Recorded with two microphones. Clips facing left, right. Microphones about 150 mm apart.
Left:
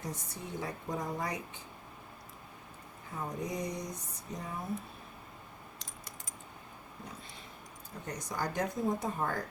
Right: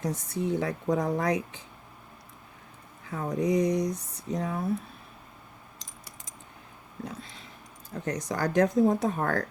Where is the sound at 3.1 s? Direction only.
85° right.